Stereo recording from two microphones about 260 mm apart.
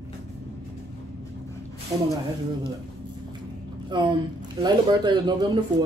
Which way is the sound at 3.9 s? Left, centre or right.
Centre.